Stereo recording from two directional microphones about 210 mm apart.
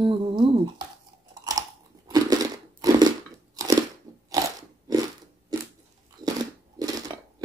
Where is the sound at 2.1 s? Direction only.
15° right (ahead or behind).